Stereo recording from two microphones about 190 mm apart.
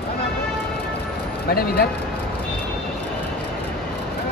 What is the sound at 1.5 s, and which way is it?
Speech, 55° left (ahead or behind).